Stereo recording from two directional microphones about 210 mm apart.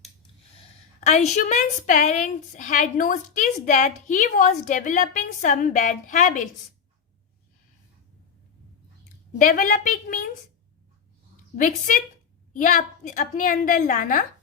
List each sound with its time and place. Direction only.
1.0 s a woman's voice: 35° left (ahead or behind)
9.4 s a woman's voice: 40° left (ahead or behind)
11.5 s a woman's voice: 40° left (ahead or behind)